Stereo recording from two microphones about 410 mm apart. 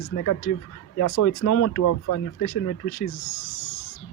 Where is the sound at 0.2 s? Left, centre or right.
Left.